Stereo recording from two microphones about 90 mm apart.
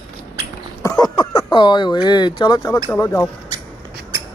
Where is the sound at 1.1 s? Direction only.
55° left (ahead or behind).